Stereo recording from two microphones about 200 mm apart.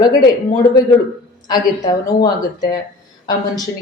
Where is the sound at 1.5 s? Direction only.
20° left (ahead or behind).